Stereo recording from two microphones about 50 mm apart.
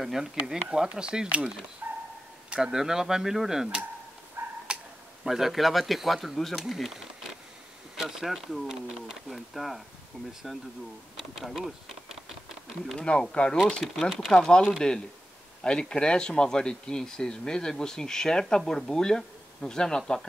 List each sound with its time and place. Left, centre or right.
0.0 s speech: centre
0.7 s speech: centre
1.8 s dog: right
2.5 s speech: centre
4.4 s dog: right
5.2 s speech: centre
11.3 s speech: centre
12.9 s speech: centre
13.7 s speech: centre
14.3 s speech: centre
15.6 s speech: centre